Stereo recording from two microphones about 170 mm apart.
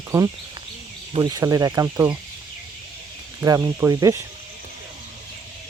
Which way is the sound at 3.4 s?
20° right (ahead or behind).